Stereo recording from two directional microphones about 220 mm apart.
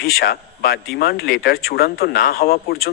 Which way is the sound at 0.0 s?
45° left (ahead or behind).